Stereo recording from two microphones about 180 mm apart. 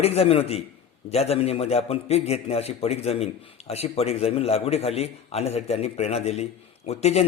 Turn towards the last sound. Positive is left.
turn(degrees=35)  # may be behind; listen again after turning